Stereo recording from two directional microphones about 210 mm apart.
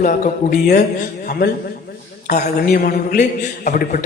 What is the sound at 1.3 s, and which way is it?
A woman's voice, 50° left (ahead or behind).